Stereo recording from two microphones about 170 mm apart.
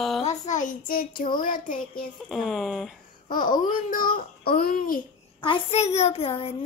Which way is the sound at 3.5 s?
55° left (ahead or behind).